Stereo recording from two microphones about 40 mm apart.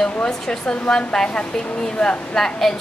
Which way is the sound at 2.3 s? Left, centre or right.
Centre.